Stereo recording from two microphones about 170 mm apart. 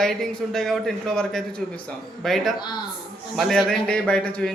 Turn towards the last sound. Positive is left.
turn(degrees=5)  # may be behind; listen again after turning